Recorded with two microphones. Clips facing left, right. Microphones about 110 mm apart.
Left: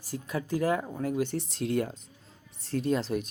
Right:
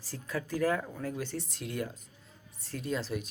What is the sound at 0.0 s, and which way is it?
Speech, 15° left (ahead or behind).